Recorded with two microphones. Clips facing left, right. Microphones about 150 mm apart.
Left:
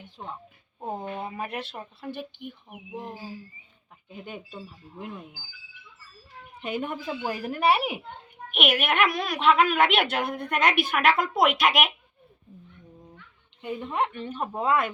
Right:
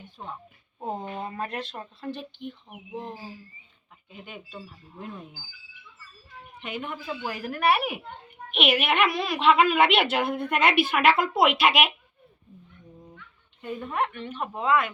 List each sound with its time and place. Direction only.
0.2 s a woman's voice: 10° left (ahead or behind)
4.9 s speech: 10° left (ahead or behind)
6.6 s speech: 35° left (ahead or behind)
8.5 s a woman's voice: centre (ahead or behind)
13.6 s speech: 15° left (ahead or behind)
13.9 s speech: 30° left (ahead or behind)